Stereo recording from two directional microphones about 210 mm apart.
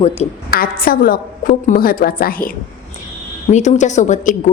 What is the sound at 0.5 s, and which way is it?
A woman's voice, 45° left (ahead or behind).